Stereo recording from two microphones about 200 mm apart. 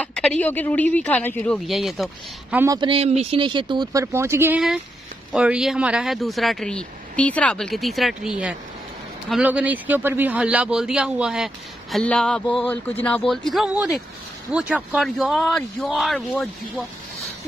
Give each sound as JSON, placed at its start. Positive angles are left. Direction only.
{"t": 0.0, "sound": "speech", "side_deg": 5}
{"t": 2.5, "sound": "speech", "side_deg": -15}